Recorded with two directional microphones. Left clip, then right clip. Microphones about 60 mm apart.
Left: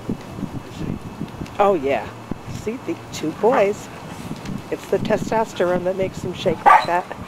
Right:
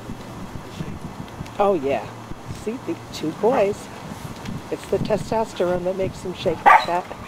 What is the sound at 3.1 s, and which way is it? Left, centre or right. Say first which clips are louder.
Speech: left 2 dB; centre.